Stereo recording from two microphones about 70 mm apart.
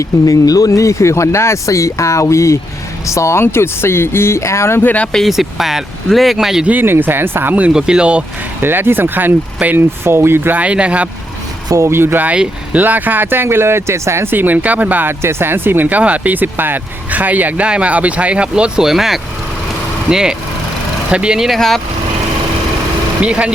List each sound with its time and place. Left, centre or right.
0.0 s speech: left
3.4 s speech: left
5.1 s speech: centre
6.7 s speech: right
7.7 s speech: centre
8.6 s speech: right
10.6 s speech: centre
11.7 s speech: right
12.2 s speech: centre; by 14.3 s right
14.3 s speech: right
15.2 s speech: right; by 21.6 s centre
23.2 s speech: centre